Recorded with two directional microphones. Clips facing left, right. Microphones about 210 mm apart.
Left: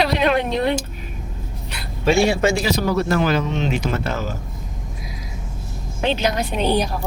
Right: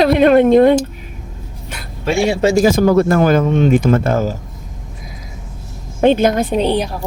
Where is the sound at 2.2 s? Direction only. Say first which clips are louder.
Right 6 dB; 25° right (ahead or behind).